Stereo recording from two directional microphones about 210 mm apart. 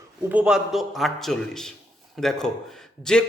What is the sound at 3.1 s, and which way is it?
Speech, 5° left (ahead or behind).